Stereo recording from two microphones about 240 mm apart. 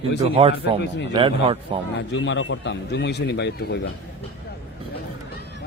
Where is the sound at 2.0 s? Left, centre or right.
Left.